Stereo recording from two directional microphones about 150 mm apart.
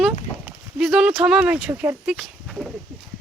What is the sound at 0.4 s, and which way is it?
Speech, 5° right (ahead or behind).